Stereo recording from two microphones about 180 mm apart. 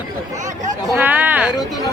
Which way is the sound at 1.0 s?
10° right (ahead or behind).